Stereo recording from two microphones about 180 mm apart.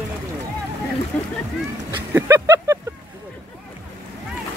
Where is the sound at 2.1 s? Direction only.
15° right (ahead or behind).